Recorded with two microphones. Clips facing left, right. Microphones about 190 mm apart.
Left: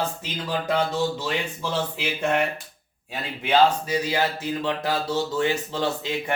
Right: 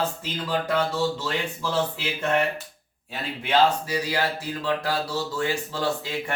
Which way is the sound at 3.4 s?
20° left (ahead or behind).